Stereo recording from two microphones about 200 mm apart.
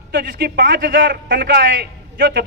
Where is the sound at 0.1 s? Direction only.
55° right (ahead or behind).